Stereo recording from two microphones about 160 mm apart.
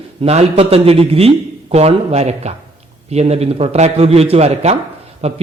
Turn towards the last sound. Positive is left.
turn(degrees=-40)  # may be behind; listen again after turning